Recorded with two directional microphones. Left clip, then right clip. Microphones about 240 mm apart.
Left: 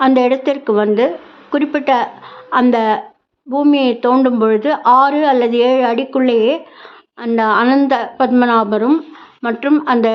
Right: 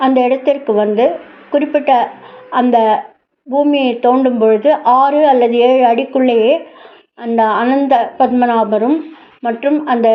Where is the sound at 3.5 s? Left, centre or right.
Centre.